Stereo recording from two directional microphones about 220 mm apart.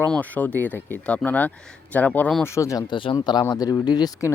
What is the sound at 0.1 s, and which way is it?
Speech, 5° left (ahead or behind).